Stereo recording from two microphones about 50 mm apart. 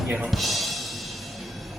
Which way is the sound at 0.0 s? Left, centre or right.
Centre.